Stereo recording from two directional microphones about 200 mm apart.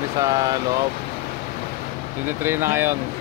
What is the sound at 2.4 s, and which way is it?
Speech, 10° right (ahead or behind).